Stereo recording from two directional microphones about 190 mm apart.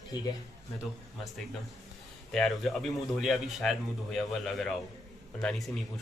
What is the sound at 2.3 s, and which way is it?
A man's voice, centre (ahead or behind).